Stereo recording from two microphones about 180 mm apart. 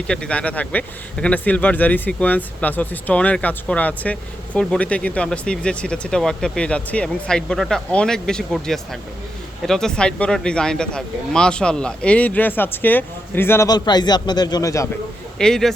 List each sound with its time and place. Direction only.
0.1 s speech: 5° left (ahead or behind)
15.4 s speech: 5° left (ahead or behind)